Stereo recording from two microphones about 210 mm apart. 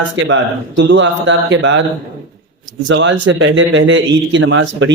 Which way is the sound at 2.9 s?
65° right (ahead or behind).